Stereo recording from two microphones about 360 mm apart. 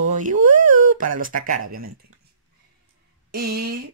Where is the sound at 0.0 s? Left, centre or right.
Right.